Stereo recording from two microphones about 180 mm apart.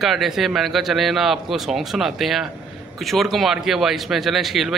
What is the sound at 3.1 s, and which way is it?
Speech, centre (ahead or behind).